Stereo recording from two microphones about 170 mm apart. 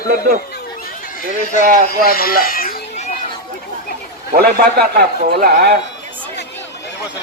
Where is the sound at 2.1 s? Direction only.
60° left (ahead or behind).